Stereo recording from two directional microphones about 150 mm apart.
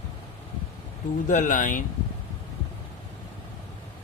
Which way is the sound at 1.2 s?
55° left (ahead or behind).